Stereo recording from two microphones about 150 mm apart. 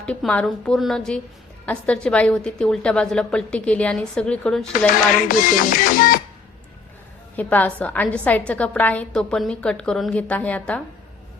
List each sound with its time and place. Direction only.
0.0 s a woman's voice: 5° left (ahead or behind)
5.3 s music: 65° left (ahead or behind)
7.3 s a woman's voice: 10° left (ahead or behind)